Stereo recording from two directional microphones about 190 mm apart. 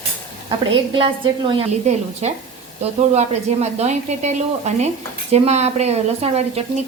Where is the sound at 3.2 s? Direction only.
35° right (ahead or behind).